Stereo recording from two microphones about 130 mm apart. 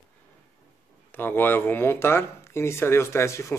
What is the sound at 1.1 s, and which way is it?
Speech, 15° left (ahead or behind).